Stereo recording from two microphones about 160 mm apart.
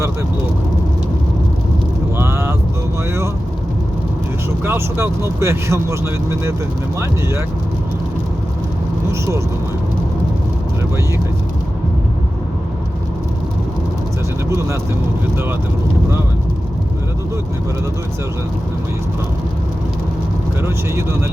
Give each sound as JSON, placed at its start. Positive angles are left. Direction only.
{"t": 2.1, "sound": "vehicle", "side_deg": -15}
{"t": 4.6, "sound": "speech", "side_deg": -15}
{"t": 7.0, "sound": "speech", "side_deg": -15}
{"t": 20.6, "sound": "speech", "side_deg": -15}